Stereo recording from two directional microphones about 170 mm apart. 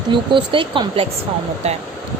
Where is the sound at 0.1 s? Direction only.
30° right (ahead or behind).